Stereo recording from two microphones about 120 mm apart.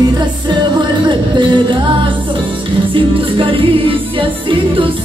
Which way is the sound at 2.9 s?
45° right (ahead or behind).